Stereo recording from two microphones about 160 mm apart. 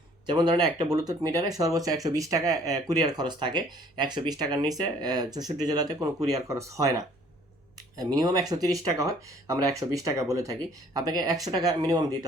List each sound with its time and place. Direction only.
0.3 s speech: 25° right (ahead or behind)